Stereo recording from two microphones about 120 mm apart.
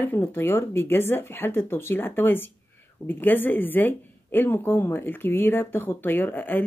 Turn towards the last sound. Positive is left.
turn(degrees=15)  # may be behind; listen again after turning